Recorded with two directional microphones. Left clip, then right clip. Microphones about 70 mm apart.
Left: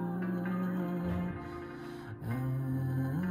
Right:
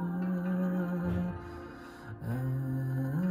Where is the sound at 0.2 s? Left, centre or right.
Right.